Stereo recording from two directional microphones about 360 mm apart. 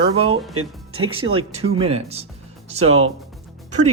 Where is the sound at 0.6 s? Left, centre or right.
Right.